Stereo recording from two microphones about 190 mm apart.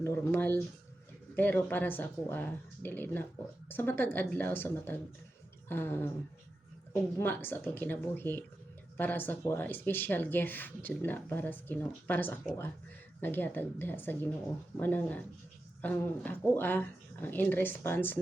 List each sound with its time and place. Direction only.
0.0 s speech: 10° left (ahead or behind)
7.2 s speech: 10° left (ahead or behind)